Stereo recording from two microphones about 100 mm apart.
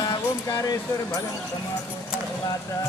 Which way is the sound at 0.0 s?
35° left (ahead or behind).